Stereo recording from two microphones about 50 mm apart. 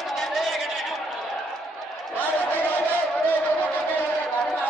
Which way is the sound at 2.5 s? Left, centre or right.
Left.